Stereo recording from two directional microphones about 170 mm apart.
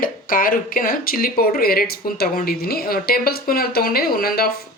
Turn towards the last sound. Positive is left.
turn(degrees=65)  # may be behind; listen again after turning